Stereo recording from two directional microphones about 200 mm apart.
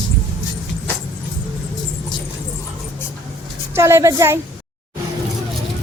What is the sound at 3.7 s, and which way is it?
Speech, 15° right (ahead or behind).